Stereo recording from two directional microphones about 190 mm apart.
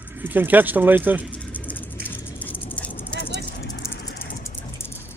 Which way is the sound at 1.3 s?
10° left (ahead or behind).